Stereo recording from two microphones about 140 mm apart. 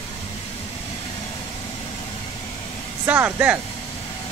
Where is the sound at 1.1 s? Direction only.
30° left (ahead or behind).